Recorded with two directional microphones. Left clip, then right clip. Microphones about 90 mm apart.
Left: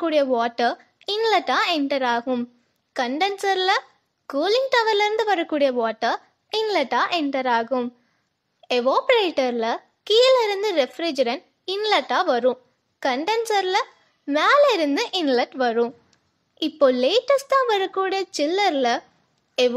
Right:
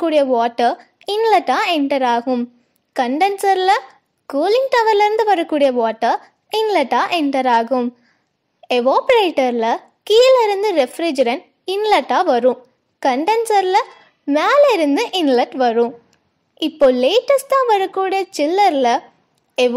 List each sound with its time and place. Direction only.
0.0 s a child's voice: 30° right (ahead or behind)